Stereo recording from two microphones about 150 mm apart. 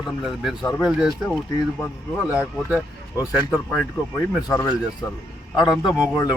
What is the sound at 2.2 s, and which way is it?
Speech, 10° right (ahead or behind).